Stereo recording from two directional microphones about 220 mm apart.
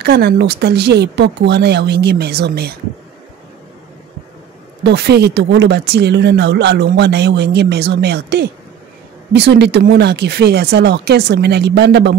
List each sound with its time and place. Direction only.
0.0 s speech: 45° right (ahead or behind)
4.8 s speech: 50° right (ahead or behind)